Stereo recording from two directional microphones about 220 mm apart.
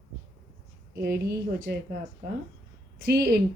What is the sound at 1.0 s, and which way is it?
Speech, 45° right (ahead or behind).